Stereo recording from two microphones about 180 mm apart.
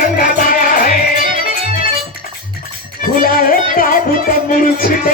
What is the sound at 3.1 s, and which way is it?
Music, 55° left (ahead or behind).